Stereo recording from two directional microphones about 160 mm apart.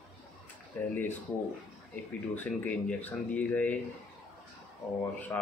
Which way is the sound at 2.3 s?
10° left (ahead or behind).